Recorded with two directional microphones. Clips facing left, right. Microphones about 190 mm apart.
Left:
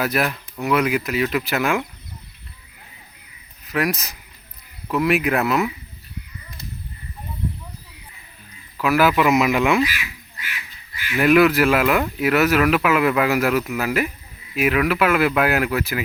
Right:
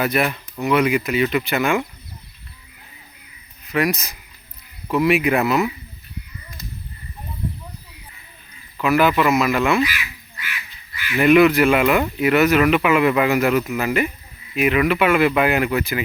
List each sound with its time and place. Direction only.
0.0 s speech: centre (ahead or behind)
3.7 s speech: centre (ahead or behind)
8.8 s speech: 5° left (ahead or behind)
11.2 s speech: centre (ahead or behind)